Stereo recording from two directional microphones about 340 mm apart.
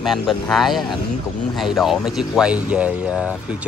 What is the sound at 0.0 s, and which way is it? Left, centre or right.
Speech, centre.